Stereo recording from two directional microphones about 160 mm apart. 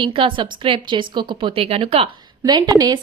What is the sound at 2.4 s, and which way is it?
Speech, 25° right (ahead or behind).